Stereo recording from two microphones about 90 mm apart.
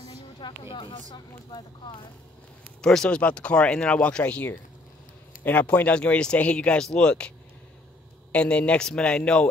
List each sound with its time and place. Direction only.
0.4 s speech: 65° left (ahead or behind)
2.8 s speech: 5° left (ahead or behind)